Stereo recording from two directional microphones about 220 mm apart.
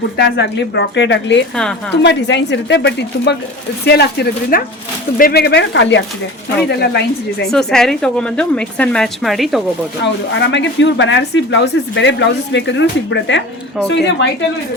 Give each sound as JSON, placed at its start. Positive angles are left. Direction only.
{"t": 0.2, "sound": "speech", "side_deg": 50}
{"t": 7.5, "sound": "a woman's voice", "side_deg": 0}
{"t": 10.0, "sound": "speech", "side_deg": 55}